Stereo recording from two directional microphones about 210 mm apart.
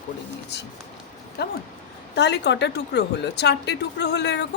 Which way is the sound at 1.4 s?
50° left (ahead or behind).